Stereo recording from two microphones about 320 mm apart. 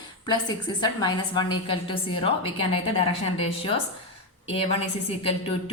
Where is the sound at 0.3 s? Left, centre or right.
Centre.